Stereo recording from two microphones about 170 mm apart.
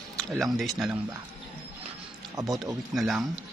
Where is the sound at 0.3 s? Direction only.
Centre (ahead or behind).